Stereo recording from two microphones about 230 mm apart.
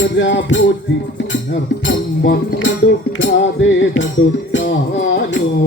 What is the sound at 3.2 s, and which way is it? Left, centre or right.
Music, left.